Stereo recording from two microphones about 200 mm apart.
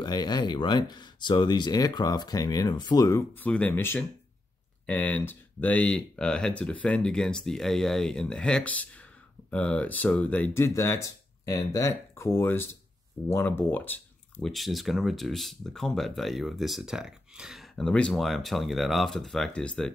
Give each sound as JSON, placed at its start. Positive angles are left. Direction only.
{"t": 0.0, "sound": "speech", "side_deg": 20}